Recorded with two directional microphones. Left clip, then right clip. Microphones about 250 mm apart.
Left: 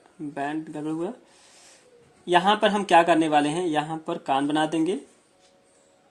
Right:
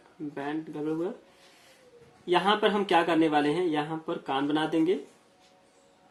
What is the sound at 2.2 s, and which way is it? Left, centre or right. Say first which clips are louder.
Speech: left 4 dB; left.